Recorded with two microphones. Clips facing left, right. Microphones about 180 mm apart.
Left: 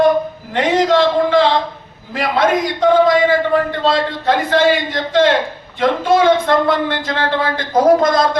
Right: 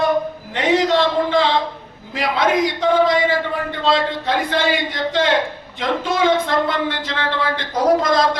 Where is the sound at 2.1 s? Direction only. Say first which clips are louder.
Left 3 dB; 50° left (ahead or behind).